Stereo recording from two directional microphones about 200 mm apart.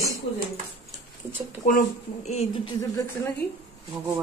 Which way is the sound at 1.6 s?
40° left (ahead or behind).